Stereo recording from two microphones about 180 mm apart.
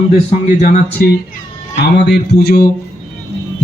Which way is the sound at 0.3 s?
40° left (ahead or behind).